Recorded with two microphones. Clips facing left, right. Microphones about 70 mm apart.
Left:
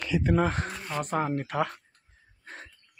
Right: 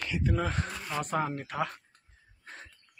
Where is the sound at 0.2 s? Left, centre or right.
Left.